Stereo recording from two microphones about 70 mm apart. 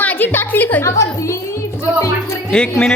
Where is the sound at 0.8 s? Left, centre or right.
Left.